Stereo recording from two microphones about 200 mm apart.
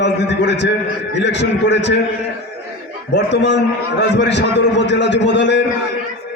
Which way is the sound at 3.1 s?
60° left (ahead or behind).